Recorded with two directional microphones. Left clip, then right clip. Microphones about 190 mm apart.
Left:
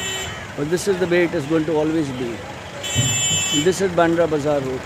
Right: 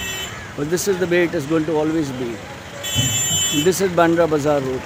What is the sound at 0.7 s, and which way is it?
Speech, 5° right (ahead or behind).